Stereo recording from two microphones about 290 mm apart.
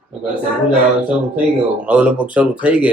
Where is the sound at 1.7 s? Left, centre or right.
Centre.